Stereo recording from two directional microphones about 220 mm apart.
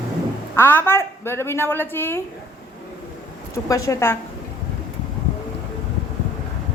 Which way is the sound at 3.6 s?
15° left (ahead or behind).